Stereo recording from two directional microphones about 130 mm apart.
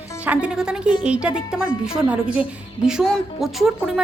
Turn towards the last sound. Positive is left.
turn(degrees=0)  # may be behind; listen again after turning